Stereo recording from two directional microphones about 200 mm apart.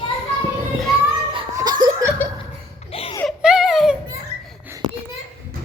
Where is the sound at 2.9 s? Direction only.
30° left (ahead or behind).